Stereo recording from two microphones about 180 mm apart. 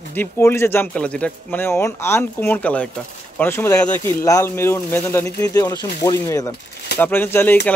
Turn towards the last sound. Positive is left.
turn(degrees=10)  # may be behind; listen again after turning